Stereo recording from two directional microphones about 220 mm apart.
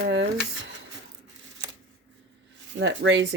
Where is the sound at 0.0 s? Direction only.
55° right (ahead or behind).